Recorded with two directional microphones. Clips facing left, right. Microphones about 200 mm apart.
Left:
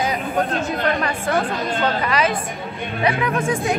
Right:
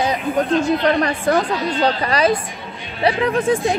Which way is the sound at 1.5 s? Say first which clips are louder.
Right 2 dB; 50° left (ahead or behind).